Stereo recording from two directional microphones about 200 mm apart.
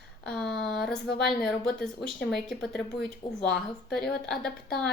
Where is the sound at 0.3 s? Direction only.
Centre (ahead or behind).